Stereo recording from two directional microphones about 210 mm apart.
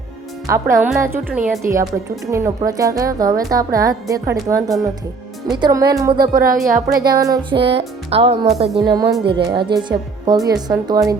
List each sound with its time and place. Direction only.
0.4 s a woman's voice: 15° right (ahead or behind)
6.3 s a woman's voice: 45° right (ahead or behind)
7.2 s a woman's voice: 15° right (ahead or behind)
7.8 s a woman's voice: 25° right (ahead or behind)
8.8 s a woman's voice: 20° right (ahead or behind)